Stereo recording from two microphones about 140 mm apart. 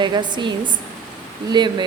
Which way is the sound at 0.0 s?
30° right (ahead or behind).